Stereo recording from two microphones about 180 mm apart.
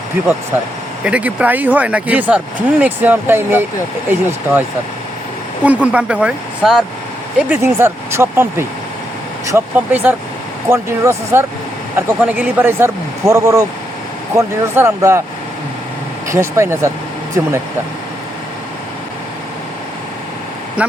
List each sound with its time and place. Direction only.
0.5 s speech: 10° right (ahead or behind)
5.6 s speech: 10° right (ahead or behind)
16.3 s speech: 15° right (ahead or behind)